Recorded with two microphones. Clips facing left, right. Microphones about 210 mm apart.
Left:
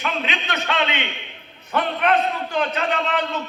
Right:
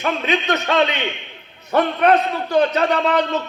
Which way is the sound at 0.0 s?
40° right (ahead or behind).